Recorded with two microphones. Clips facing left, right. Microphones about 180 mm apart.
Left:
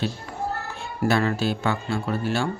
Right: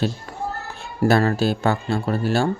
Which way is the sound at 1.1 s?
40° right (ahead or behind).